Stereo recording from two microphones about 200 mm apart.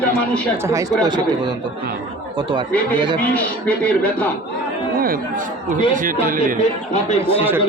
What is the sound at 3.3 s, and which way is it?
Speech, 5° left (ahead or behind).